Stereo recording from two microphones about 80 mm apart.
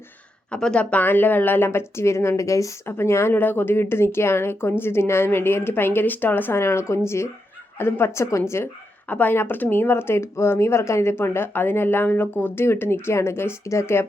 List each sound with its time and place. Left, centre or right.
0.5 s speech: centre; by 2.7 s left
2.8 s speech: left
9.0 s speech: left